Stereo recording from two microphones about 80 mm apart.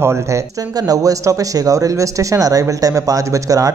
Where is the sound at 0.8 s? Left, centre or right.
Right.